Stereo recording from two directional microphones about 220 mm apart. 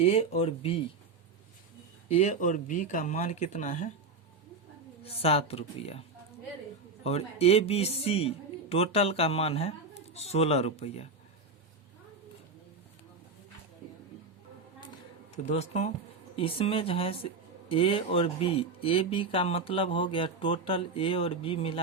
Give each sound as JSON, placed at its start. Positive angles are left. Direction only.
{"t": 0.0, "sound": "a man's voice", "side_deg": 25}
{"t": 2.0, "sound": "speech", "side_deg": 30}
{"t": 5.0, "sound": "a man's voice", "side_deg": 25}
{"t": 15.4, "sound": "a man's voice", "side_deg": 30}